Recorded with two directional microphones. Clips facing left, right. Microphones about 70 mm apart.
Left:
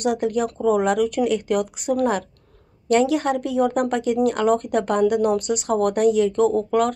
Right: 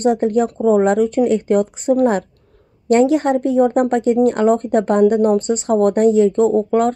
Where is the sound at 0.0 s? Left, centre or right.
Right.